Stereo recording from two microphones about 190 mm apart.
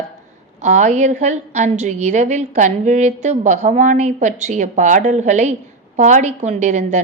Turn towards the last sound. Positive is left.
turn(degrees=-40)  # may be behind; listen again after turning